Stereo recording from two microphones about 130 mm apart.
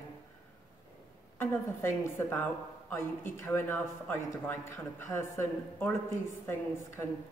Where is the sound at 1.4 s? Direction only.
20° left (ahead or behind).